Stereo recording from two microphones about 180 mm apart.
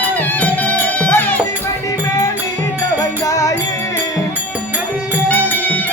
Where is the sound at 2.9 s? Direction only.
20° left (ahead or behind).